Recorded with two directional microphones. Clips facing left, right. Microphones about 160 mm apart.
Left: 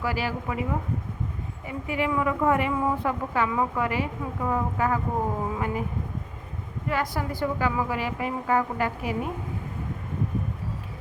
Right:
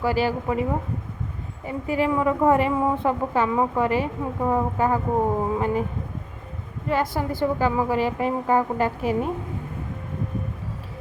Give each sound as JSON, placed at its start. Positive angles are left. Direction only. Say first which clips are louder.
{"t": 0.0, "sound": "a woman's voice", "louder": "right 6 dB", "side_deg": -30}
{"t": 6.8, "sound": "a woman's voice", "louder": "right 4 dB", "side_deg": -25}